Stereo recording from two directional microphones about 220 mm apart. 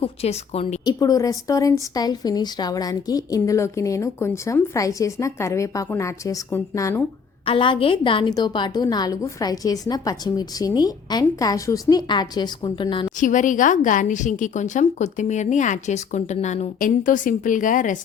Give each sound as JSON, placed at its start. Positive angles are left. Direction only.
{"t": 0.0, "sound": "a woman's voice", "side_deg": 25}
{"t": 7.4, "sound": "a woman's voice", "side_deg": 25}
{"t": 13.1, "sound": "a woman's voice", "side_deg": 35}